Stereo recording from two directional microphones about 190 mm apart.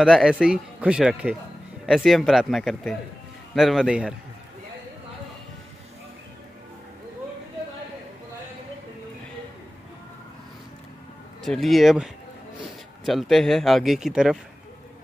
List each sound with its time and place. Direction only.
0.0 s a man's voice: centre (ahead or behind)
11.4 s a man's voice: centre (ahead or behind)